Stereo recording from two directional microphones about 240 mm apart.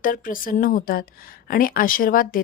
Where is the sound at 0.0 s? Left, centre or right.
Left.